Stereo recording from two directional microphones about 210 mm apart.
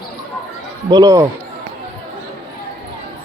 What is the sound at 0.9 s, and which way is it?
Speech, 15° right (ahead or behind).